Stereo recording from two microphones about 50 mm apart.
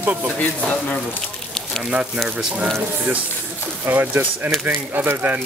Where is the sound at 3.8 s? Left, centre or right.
Right.